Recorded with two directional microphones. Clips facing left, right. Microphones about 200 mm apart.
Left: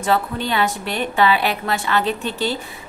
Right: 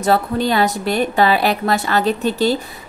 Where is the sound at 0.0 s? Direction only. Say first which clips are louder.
Right 4 dB; 40° right (ahead or behind).